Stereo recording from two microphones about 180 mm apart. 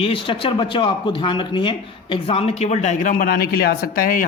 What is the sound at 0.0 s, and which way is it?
Speech, 30° left (ahead or behind).